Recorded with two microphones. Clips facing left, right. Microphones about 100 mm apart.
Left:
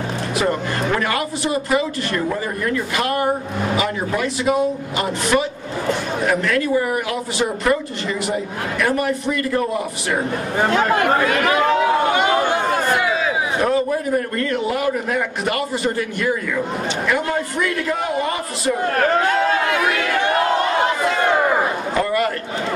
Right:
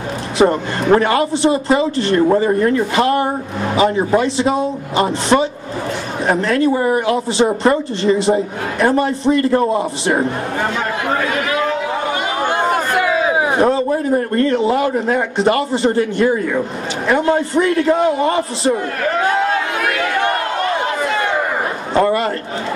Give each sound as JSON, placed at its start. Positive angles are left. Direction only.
{"t": 0.4, "sound": "speech", "side_deg": -30}
{"t": 10.7, "sound": "speech", "side_deg": 55}
{"t": 13.0, "sound": "a sound", "side_deg": -55}
{"t": 13.6, "sound": "speech", "side_deg": -25}
{"t": 21.9, "sound": "a man's voice", "side_deg": -30}